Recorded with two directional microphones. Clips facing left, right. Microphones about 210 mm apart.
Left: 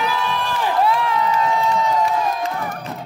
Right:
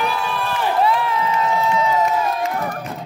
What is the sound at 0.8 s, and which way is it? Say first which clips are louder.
Crowd: left 1 dB; centre (ahead or behind).